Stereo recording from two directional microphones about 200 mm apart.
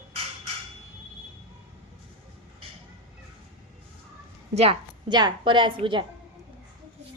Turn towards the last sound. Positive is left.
turn(degrees=-25)  # may be behind; listen again after turning